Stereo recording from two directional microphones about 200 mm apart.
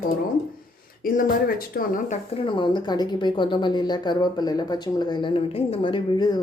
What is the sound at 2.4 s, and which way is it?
Speech, 25° left (ahead or behind).